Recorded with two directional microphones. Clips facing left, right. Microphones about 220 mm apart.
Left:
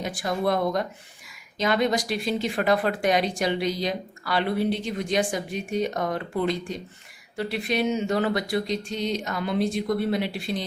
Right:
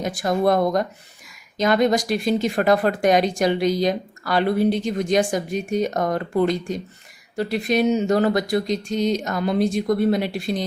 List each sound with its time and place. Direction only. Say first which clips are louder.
0.0 s speech: right 6 dB; 45° right (ahead or behind)